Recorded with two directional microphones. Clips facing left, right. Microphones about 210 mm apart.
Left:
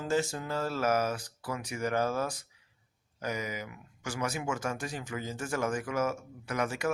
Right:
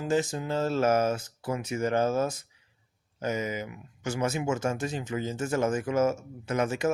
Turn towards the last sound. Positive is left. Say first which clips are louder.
# right 4 dB
turn(degrees=-25)  # may be behind; listen again after turning